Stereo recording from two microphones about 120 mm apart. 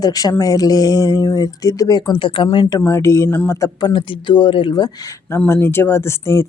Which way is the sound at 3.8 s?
40° left (ahead or behind).